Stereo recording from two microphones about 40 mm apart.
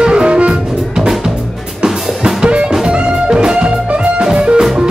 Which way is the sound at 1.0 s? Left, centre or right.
Centre.